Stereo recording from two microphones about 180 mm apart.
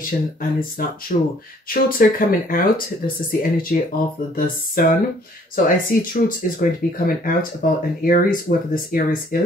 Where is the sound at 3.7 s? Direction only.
55° left (ahead or behind).